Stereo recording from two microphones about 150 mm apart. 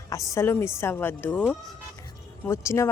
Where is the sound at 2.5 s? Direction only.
20° left (ahead or behind).